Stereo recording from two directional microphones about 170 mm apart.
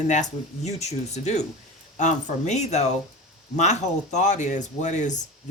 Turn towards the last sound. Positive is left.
turn(degrees=45)  # may be behind; listen again after turning